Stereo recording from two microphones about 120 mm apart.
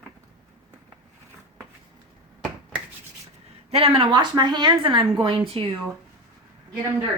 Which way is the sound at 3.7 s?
55° right (ahead or behind).